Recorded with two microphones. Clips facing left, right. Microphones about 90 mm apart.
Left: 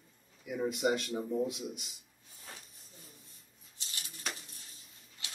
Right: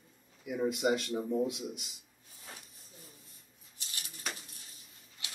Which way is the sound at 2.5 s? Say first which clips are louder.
Right 1 dB; 5° right (ahead or behind).